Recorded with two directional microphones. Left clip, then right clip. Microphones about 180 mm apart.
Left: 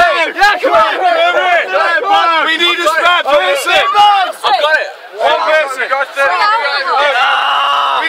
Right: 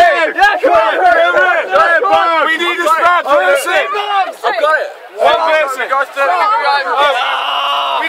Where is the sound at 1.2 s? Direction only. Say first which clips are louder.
Right 1 dB; 20° right (ahead or behind).